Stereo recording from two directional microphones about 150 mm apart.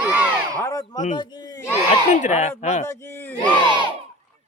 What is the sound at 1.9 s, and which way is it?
Speech, 50° left (ahead or behind).